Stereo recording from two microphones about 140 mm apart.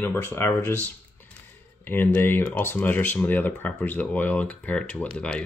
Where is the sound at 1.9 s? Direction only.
15° left (ahead or behind).